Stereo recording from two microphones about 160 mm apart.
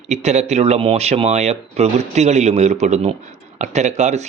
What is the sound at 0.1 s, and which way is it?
Speech, 45° right (ahead or behind).